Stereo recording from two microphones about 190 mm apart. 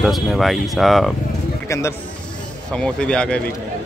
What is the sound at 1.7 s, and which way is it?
Speech, 15° left (ahead or behind).